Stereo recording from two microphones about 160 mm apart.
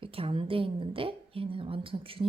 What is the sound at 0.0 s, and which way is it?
A woman's voice, 35° right (ahead or behind).